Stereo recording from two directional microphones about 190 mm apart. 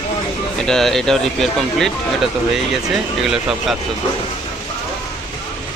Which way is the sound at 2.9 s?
Centre (ahead or behind).